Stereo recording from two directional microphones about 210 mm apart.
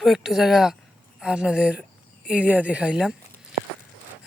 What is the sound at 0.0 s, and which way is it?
Speech, centre (ahead or behind).